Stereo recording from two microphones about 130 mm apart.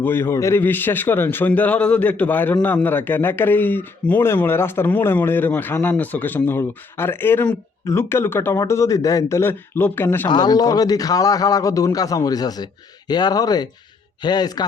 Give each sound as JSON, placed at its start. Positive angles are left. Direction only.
{"t": 0.0, "sound": "a man's voice", "side_deg": 15}
{"t": 10.2, "sound": "a man's voice", "side_deg": 30}